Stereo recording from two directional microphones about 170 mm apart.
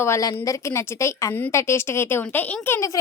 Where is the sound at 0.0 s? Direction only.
20° left (ahead or behind).